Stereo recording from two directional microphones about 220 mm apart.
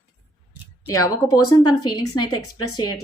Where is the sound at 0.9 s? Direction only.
15° left (ahead or behind).